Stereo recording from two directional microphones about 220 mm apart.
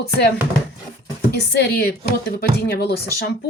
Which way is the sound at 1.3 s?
50° left (ahead or behind).